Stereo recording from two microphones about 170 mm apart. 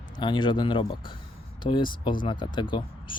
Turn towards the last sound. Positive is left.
turn(degrees=30)  # may be behind; listen again after turning